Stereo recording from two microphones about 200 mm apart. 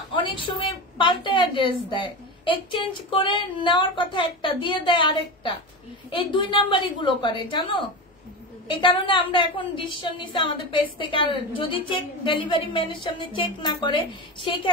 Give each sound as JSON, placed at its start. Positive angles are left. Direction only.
{"t": 0.1, "sound": "a woman's voice", "side_deg": 25}
{"t": 8.8, "sound": "a woman's voice", "side_deg": 25}